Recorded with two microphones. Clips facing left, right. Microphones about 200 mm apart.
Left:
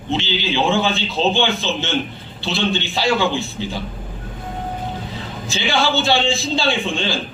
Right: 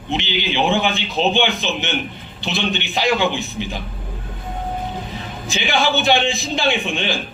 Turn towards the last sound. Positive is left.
turn(degrees=-15)  # may be behind; listen again after turning